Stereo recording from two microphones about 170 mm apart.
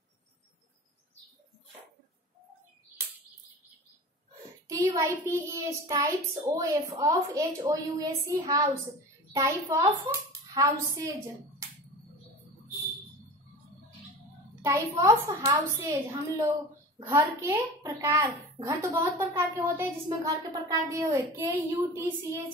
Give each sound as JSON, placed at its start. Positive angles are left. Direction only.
{"t": 4.6, "sound": "a woman's voice", "side_deg": -20}
{"t": 14.6, "sound": "a woman's voice", "side_deg": -15}